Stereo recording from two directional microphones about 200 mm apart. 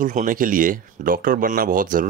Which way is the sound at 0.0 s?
40° right (ahead or behind).